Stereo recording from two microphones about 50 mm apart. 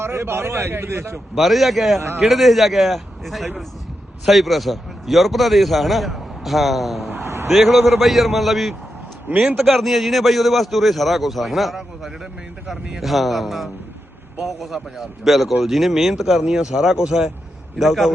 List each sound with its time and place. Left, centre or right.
0.0 s speech: right
1.4 s a man's voice: centre
7.3 s a sound: right
7.5 s a man's voice: centre